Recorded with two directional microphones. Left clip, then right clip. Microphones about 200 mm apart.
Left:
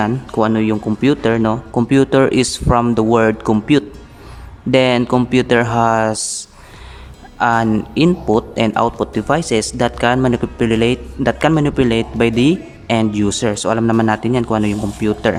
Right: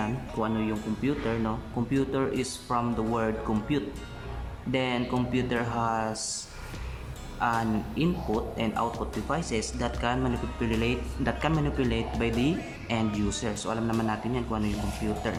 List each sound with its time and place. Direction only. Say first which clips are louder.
0.0 s speech: left 14 dB; 45° left (ahead or behind)